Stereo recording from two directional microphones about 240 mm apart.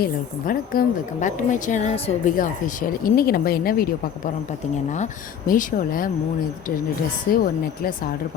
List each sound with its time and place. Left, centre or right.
0.0 s speech: left
5.5 s speech: left
7.3 s speech: left